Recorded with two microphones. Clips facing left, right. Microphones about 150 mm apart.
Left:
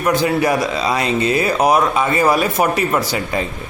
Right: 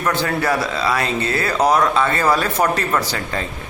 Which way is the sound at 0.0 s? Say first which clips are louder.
Left 4 dB; 15° left (ahead or behind).